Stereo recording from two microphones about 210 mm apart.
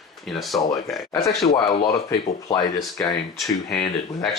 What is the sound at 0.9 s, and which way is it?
Speech, 15° left (ahead or behind).